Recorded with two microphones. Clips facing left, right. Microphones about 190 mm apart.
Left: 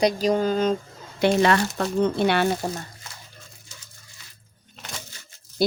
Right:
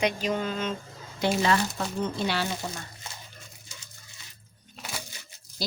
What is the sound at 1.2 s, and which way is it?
A woman's voice, 65° left (ahead or behind).